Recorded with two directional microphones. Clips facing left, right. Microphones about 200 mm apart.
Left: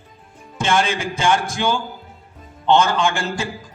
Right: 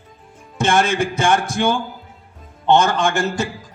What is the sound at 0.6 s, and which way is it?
A man's voice, 55° right (ahead or behind).